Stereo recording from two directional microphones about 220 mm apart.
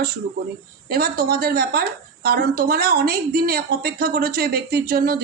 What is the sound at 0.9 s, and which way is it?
Speech, 45° right (ahead or behind).